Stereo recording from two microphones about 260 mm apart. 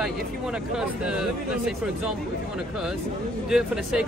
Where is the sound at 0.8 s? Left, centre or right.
Centre.